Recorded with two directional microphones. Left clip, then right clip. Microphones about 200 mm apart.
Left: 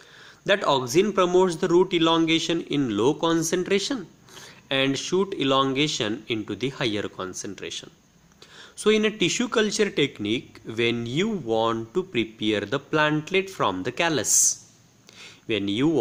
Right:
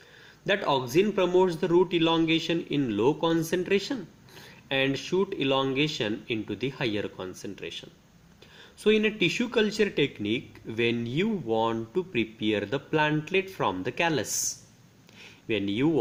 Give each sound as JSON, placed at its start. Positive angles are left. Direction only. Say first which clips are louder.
{"t": 0.4, "sound": "a man's voice", "louder": "left 4 dB", "side_deg": 40}
{"t": 15.4, "sound": "a man's voice", "louder": "left 3 dB", "side_deg": 35}